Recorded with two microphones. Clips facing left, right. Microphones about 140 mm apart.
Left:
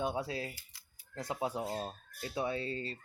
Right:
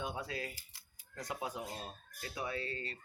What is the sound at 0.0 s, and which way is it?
Speech, 30° left (ahead or behind).